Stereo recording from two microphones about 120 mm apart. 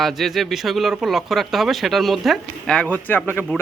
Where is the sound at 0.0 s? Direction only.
Centre (ahead or behind).